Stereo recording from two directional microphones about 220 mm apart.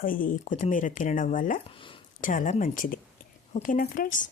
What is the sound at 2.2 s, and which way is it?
Speech, 35° left (ahead or behind).